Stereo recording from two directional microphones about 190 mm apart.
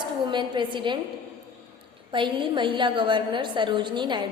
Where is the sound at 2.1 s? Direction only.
25° right (ahead or behind).